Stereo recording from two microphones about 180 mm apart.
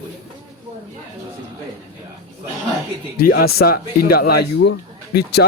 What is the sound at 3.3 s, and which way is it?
A man's voice, 60° left (ahead or behind).